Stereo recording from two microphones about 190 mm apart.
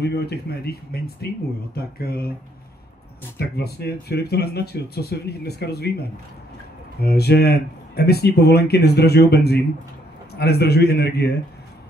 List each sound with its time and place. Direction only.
0.0 s speech: 60° left (ahead or behind)
3.3 s speech: 60° left (ahead or behind)
7.0 s speech: 55° left (ahead or behind)